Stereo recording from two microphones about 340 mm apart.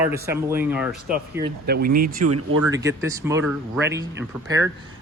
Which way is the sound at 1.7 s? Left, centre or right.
Right.